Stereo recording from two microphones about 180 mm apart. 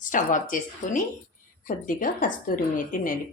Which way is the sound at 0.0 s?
45° left (ahead or behind).